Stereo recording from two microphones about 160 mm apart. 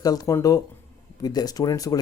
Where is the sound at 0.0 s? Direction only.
25° left (ahead or behind).